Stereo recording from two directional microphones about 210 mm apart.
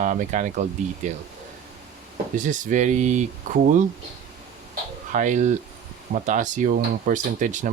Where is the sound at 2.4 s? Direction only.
35° right (ahead or behind).